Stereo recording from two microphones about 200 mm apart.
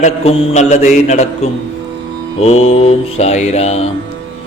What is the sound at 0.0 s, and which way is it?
Mantra, 35° left (ahead or behind).